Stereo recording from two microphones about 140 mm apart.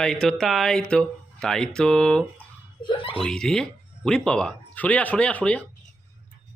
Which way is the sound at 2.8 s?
40° left (ahead or behind).